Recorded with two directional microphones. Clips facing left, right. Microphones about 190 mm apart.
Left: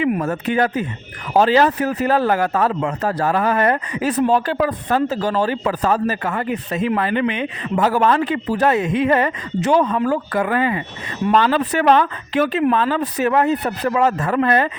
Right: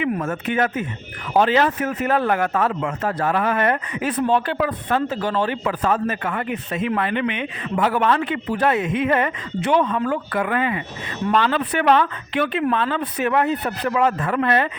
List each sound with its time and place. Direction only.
0.2 s speech: 40° left (ahead or behind)